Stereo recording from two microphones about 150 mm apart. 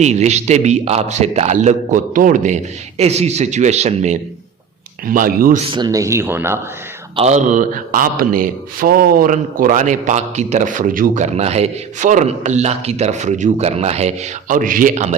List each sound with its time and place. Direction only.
0.0 s a man's voice: 50° right (ahead or behind)
3.0 s a man's voice: 45° right (ahead or behind)
5.0 s speech: 70° right (ahead or behind)
5.7 s speech: 25° right (ahead or behind)
7.2 s speech: 50° right (ahead or behind)